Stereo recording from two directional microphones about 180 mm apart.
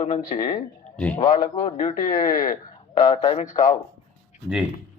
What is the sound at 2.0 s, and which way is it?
Speech, 50° left (ahead or behind).